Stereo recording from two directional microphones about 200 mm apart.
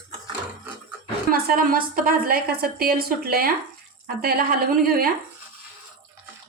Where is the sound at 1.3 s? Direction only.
45° right (ahead or behind).